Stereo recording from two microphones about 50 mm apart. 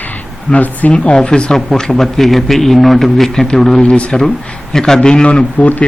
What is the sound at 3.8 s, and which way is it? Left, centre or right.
A man's voice, left.